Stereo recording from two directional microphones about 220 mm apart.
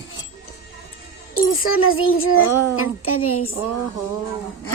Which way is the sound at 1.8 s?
70° left (ahead or behind).